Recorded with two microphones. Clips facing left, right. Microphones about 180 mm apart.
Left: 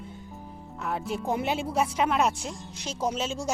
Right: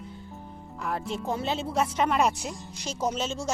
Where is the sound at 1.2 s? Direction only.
15° left (ahead or behind).